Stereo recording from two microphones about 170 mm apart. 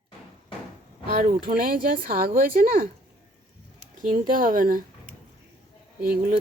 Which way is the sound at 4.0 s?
55° right (ahead or behind).